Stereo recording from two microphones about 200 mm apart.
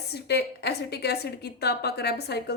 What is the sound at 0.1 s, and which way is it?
Speech, 55° left (ahead or behind).